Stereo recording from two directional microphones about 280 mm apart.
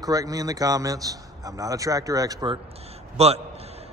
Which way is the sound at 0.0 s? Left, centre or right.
Centre.